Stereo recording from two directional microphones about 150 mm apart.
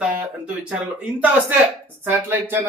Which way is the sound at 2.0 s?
15° right (ahead or behind).